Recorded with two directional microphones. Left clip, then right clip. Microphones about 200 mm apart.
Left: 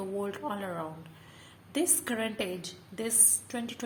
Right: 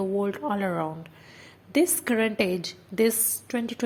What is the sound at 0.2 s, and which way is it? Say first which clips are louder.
A woman's voice: right 7 dB; 20° right (ahead or behind).